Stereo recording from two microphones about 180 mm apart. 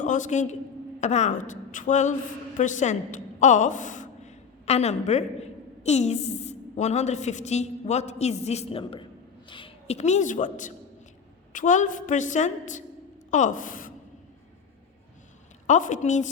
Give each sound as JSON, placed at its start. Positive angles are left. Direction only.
{"t": 0.0, "sound": "a man's voice", "side_deg": 45}
{"t": 15.6, "sound": "a woman's voice", "side_deg": 45}